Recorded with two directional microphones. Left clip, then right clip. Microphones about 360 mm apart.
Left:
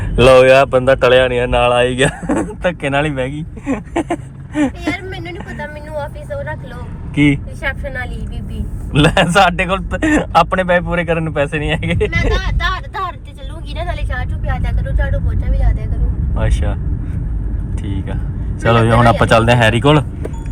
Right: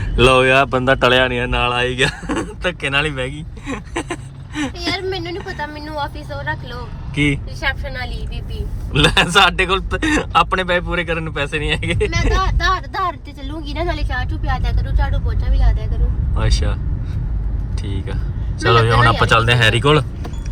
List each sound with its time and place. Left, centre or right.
0.2 s speech: centre
4.9 s vehicle: right
7.6 s speech: right
8.9 s speech: centre
12.1 s speech: right
13.7 s vehicle: right
16.3 s speech: centre
17.8 s speech: centre